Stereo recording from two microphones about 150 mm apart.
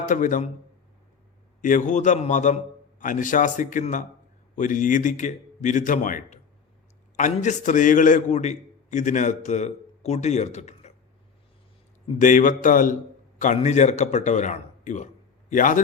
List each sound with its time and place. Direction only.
0.0 s a man's voice: 60° left (ahead or behind)
1.6 s a man's voice: 60° left (ahead or behind)
12.2 s a man's voice: 60° left (ahead or behind)
13.4 s a man's voice: 50° left (ahead or behind)